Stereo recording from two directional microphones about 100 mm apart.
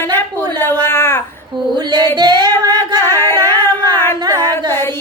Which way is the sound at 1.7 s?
45° right (ahead or behind).